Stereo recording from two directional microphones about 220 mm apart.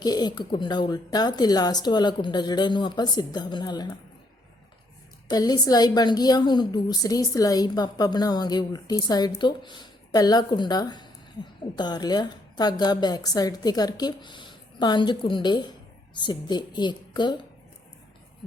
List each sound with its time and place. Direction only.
0.0 s a woman's voice: 15° left (ahead or behind)
5.3 s a woman's voice: 15° left (ahead or behind)